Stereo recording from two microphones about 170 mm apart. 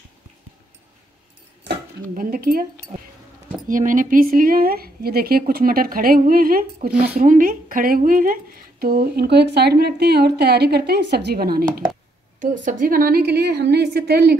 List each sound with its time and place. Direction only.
2.1 s speech: 60° right (ahead or behind)
3.6 s speech: 50° right (ahead or behind)
12.4 s a woman's voice: 50° right (ahead or behind); by 14.3 s 75° right (ahead or behind)